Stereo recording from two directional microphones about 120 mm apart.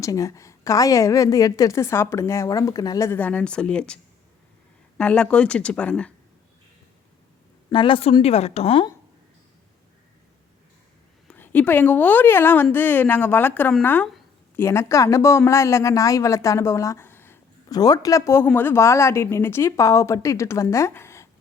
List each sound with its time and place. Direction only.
0.0 s a woman's voice: 25° left (ahead or behind)
3.2 s speech: 15° left (ahead or behind)
7.7 s a woman's voice: 45° left (ahead or behind)
11.3 s a woman's voice: 15° left (ahead or behind)
17.7 s a woman's voice: 35° left (ahead or behind)